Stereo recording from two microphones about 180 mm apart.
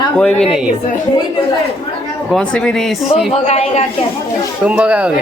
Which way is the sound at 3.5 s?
35° left (ahead or behind).